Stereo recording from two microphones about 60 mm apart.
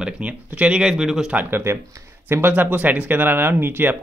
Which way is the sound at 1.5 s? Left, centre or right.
Right.